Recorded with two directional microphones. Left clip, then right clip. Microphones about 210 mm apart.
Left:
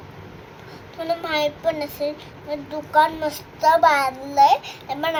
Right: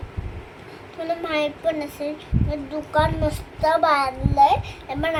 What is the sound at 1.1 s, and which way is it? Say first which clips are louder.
A child's voice: left 1 dB; 10° right (ahead or behind).